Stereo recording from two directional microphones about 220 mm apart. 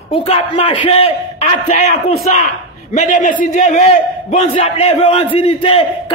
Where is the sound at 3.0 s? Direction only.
35° left (ahead or behind).